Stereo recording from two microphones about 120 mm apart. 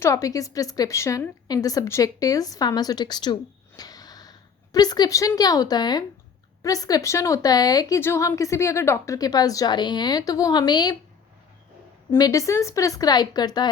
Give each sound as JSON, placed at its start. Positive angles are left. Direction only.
{"t": 0.0, "sound": "a woman's voice", "side_deg": 25}
{"t": 12.1, "sound": "a woman's voice", "side_deg": 30}